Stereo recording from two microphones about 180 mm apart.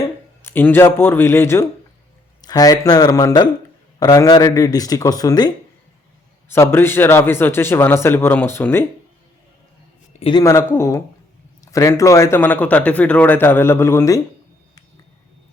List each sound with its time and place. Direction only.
0.4 s a man's voice: 10° left (ahead or behind)
6.5 s a man's voice: 15° left (ahead or behind)
10.1 s a sound: 30° left (ahead or behind)
10.4 s a man's voice: 15° left (ahead or behind)